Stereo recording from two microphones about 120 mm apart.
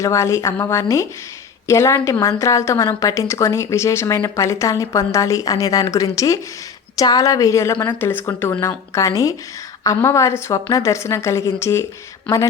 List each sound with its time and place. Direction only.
0.0 s a woman's voice: 25° left (ahead or behind)